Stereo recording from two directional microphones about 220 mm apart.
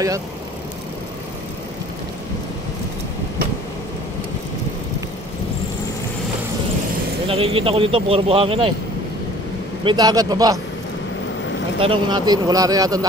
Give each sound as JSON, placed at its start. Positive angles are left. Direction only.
{"t": 7.2, "sound": "speech", "side_deg": -25}
{"t": 9.8, "sound": "speech", "side_deg": -20}
{"t": 11.8, "sound": "speech", "side_deg": -20}